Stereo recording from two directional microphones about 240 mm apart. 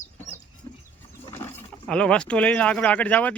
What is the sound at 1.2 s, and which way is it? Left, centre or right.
Speech, centre.